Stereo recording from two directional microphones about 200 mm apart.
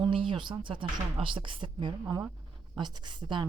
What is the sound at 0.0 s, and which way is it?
Speech, 25° right (ahead or behind).